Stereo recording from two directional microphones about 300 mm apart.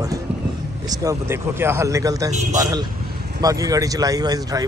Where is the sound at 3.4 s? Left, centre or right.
Centre.